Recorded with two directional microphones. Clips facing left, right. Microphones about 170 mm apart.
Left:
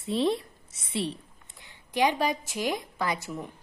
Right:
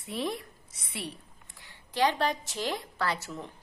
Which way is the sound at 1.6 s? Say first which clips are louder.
Left 2 dB; 15° left (ahead or behind).